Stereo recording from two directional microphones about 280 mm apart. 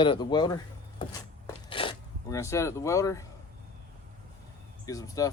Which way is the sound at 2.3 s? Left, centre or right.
Centre.